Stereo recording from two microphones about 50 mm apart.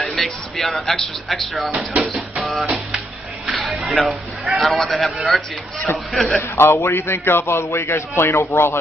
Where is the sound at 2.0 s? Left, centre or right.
Centre.